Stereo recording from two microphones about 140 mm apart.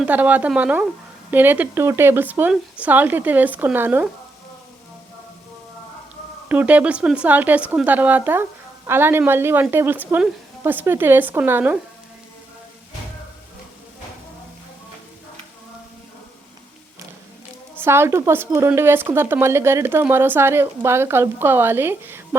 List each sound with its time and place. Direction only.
0.0 s a woman's voice: 10° right (ahead or behind)
6.5 s a woman's voice: 10° right (ahead or behind)
17.7 s a woman's voice: 15° right (ahead or behind)